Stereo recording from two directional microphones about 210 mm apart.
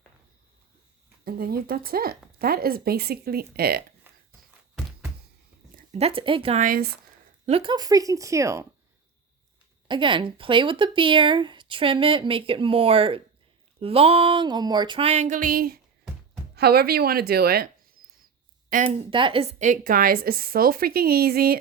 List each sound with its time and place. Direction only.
1.2 s a woman's voice: 45° right (ahead or behind)
4.0 s walk: 10° right (ahead or behind)
5.7 s speech: 30° right (ahead or behind)
7.4 s speech: 25° right (ahead or behind)
9.9 s a woman's voice: 25° right (ahead or behind); by 17.7 s 50° right (ahead or behind)
18.7 s speech: 40° right (ahead or behind)
19.1 s a woman's voice: 25° right (ahead or behind); by 21.6 s 45° right (ahead or behind)